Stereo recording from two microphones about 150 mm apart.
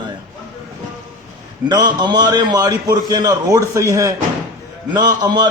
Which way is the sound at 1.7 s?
30° right (ahead or behind).